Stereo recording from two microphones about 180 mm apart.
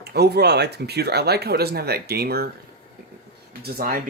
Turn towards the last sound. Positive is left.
turn(degrees=-55)  # may be behind; listen again after turning